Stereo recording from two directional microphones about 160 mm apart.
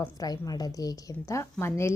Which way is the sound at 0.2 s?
25° left (ahead or behind).